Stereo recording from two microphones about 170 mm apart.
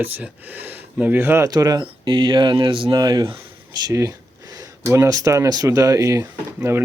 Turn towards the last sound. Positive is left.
turn(degrees=-15)  # may be behind; listen again after turning